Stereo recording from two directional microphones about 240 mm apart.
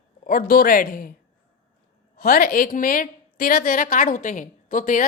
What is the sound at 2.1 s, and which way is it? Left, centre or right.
A woman's voice, left.